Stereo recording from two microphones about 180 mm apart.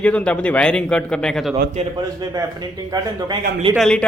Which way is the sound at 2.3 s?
20° right (ahead or behind).